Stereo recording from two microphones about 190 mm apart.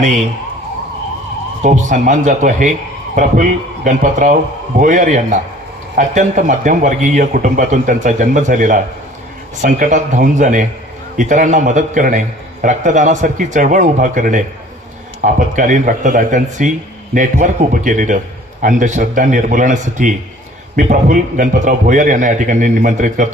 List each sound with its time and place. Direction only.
1.6 s a man's voice: 40° right (ahead or behind)